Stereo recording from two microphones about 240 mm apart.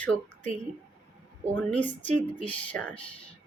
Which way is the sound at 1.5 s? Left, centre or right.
Centre.